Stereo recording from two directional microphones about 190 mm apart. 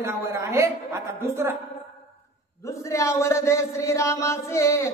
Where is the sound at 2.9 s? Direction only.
15° left (ahead or behind).